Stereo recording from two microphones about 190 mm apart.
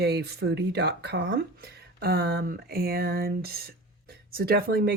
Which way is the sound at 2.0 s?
55° right (ahead or behind).